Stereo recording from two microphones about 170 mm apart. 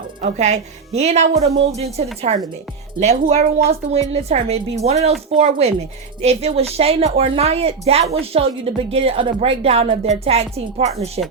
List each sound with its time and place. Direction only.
0.2 s a woman's voice: 45° right (ahead or behind)